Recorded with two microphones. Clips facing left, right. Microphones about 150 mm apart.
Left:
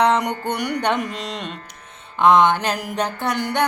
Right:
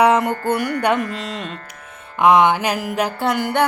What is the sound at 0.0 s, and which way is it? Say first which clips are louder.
Mantra: right 3 dB; 5° right (ahead or behind).